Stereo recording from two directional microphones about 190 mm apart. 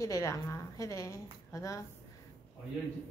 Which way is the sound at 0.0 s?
15° left (ahead or behind).